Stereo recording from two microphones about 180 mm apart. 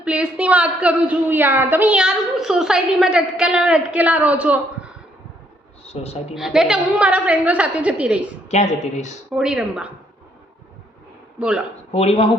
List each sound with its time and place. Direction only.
0.0 s a woman's voice: 5° right (ahead or behind)
5.8 s a woman's voice: 35° left (ahead or behind)
6.3 s a woman's voice: 5° right (ahead or behind)
8.4 s a woman's voice: 40° left (ahead or behind)
9.3 s speech: 5° right (ahead or behind)
11.3 s a man's voice: 5° right (ahead or behind)
11.9 s speech: 35° left (ahead or behind)